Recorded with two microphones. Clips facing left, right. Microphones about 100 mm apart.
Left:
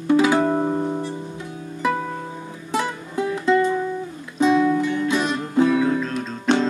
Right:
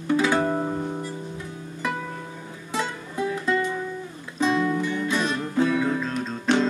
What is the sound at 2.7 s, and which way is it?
Music, 20° left (ahead or behind).